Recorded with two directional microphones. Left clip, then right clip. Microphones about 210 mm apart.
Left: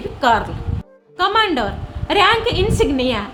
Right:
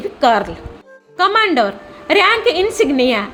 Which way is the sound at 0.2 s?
20° right (ahead or behind).